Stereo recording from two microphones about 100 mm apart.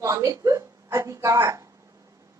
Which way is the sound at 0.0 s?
30° right (ahead or behind).